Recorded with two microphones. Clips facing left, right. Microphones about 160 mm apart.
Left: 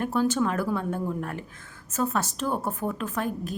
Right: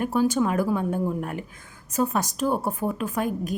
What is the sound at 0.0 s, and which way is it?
A woman's voice, 10° right (ahead or behind).